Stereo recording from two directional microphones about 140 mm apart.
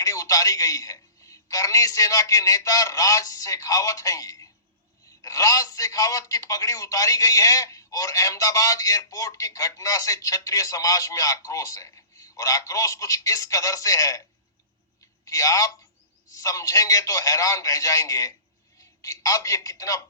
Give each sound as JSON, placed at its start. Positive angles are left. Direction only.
{"t": 0.0, "sound": "a man's voice", "side_deg": 25}